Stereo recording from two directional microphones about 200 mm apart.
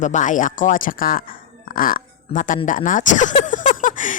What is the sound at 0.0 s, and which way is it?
A woman's voice, 40° left (ahead or behind).